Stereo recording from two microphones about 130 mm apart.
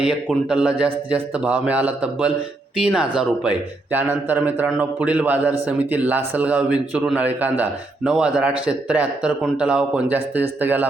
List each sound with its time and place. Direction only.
0.0 s a man's voice: 5° right (ahead or behind)